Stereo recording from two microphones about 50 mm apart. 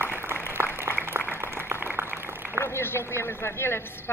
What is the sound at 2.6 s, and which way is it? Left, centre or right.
Speech, left.